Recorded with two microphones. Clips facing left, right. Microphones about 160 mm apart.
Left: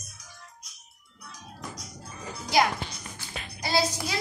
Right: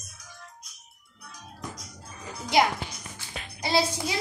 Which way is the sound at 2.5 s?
25° right (ahead or behind).